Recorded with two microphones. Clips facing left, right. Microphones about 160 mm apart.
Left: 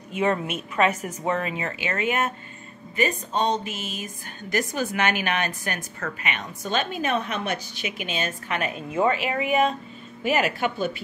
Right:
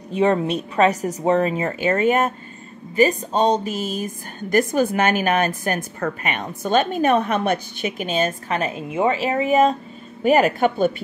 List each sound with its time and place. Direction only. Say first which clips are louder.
0.1 s a woman's voice: right 6 dB; 30° right (ahead or behind)
8.7 s a woman's voice: right 1 dB; 25° right (ahead or behind)
9.2 s a woman's voice: right 5 dB; 35° right (ahead or behind)